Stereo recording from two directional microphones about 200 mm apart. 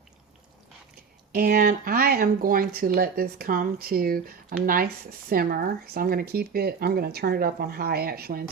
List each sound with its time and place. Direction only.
1.3 s speech: 45° right (ahead or behind)